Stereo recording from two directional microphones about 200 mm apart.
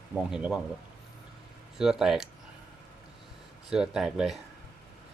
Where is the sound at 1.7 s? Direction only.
5° right (ahead or behind).